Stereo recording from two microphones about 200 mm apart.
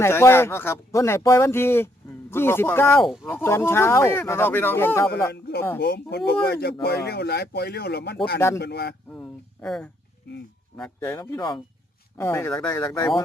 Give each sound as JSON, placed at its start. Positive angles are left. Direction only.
{"t": 0.0, "sound": "speech", "side_deg": 10}
{"t": 5.3, "sound": "speech", "side_deg": 55}
{"t": 9.1, "sound": "speech", "side_deg": 5}
{"t": 10.3, "sound": "speech", "side_deg": 60}
{"t": 10.8, "sound": "speech", "side_deg": 5}
{"t": 11.2, "sound": "speech", "side_deg": 20}